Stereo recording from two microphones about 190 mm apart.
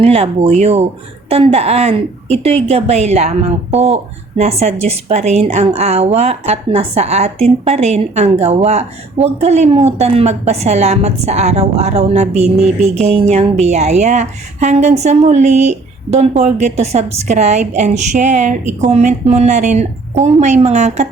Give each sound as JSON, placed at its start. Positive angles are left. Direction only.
{"t": 0.0, "sound": "a woman's voice", "side_deg": -35}